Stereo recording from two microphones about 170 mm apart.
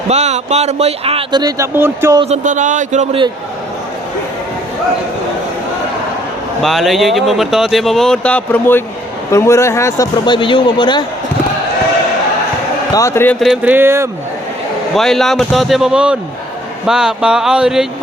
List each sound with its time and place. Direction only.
0.1 s a man's voice: 40° right (ahead or behind); by 2.2 s 15° right (ahead or behind)
2.3 s speech: 45° right (ahead or behind)
6.6 s a man's voice: centre (ahead or behind); by 11.0 s 25° left (ahead or behind)
12.9 s speech: 20° left (ahead or behind)
13.4 s speech: 5° right (ahead or behind)
14.9 s speech: centre (ahead or behind)